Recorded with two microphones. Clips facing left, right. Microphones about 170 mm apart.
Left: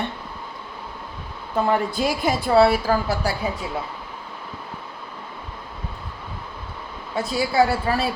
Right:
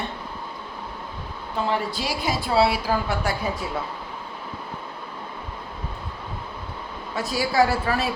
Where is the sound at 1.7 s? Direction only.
50° left (ahead or behind).